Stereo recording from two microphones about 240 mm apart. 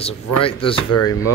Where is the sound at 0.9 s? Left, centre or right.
Left.